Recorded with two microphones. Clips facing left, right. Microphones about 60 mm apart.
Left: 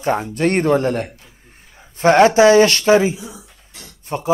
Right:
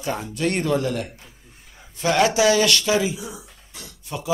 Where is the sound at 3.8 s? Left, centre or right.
Left.